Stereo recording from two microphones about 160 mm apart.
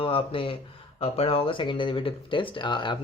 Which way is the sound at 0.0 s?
35° left (ahead or behind).